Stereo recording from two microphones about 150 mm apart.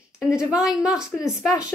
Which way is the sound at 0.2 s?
5° right (ahead or behind).